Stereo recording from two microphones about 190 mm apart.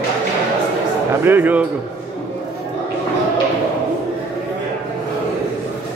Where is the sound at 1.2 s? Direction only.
10° right (ahead or behind).